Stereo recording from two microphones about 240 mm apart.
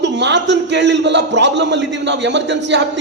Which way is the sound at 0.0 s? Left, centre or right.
Right.